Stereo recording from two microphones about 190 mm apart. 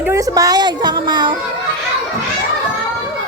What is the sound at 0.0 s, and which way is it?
A woman's voice, 15° right (ahead or behind).